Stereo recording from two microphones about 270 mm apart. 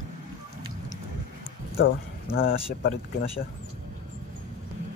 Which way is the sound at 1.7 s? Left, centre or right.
Left.